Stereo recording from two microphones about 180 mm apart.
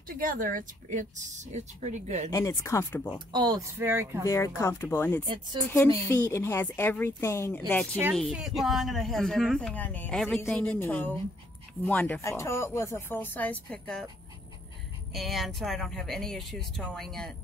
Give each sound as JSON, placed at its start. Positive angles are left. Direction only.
{"t": 0.2, "sound": "a woman's voice", "side_deg": -50}
{"t": 2.3, "sound": "speech", "side_deg": 15}
{"t": 3.3, "sound": "speech", "side_deg": -20}
{"t": 4.2, "sound": "speech", "side_deg": 15}
{"t": 15.1, "sound": "speech", "side_deg": 0}